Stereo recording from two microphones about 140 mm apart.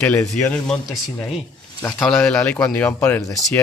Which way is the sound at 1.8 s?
5° left (ahead or behind).